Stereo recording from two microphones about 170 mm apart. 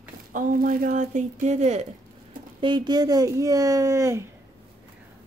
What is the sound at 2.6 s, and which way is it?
Speech, 25° right (ahead or behind).